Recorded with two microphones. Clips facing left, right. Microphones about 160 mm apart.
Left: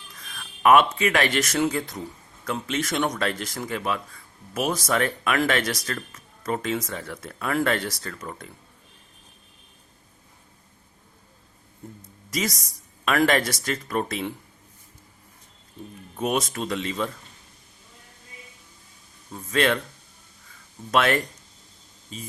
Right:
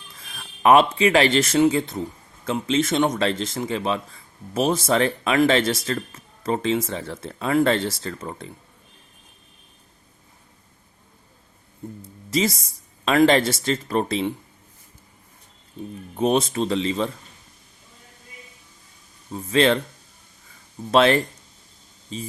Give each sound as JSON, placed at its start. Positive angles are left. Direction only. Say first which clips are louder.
{"t": 0.2, "sound": "speech", "louder": "right 1 dB", "side_deg": -30}
{"t": 12.3, "sound": "speech", "louder": "right 6 dB", "side_deg": -30}
{"t": 16.1, "sound": "speech", "louder": "right 5 dB", "side_deg": -30}
{"t": 19.3, "sound": "speech", "louder": "right 4 dB", "side_deg": -30}
{"t": 20.9, "sound": "speech", "louder": "right 5 dB", "side_deg": -30}